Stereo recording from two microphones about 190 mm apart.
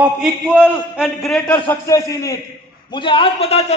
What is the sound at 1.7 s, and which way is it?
A man's voice, 15° left (ahead or behind).